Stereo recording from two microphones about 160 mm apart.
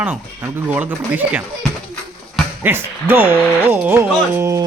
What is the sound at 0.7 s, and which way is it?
Speech, 10° right (ahead or behind).